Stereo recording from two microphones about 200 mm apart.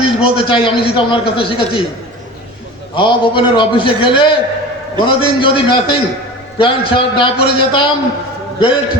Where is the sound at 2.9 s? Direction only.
25° left (ahead or behind).